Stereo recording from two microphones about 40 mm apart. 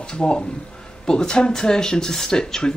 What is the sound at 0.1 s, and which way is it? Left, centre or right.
Speech, left.